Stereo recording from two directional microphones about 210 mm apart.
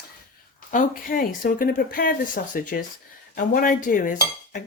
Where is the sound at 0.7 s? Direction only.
40° left (ahead or behind).